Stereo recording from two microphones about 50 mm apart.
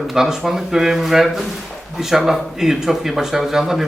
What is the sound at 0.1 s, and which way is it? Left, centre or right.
Speech, centre.